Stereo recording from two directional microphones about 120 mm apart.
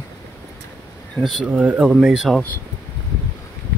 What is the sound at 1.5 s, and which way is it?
Speech, 10° right (ahead or behind).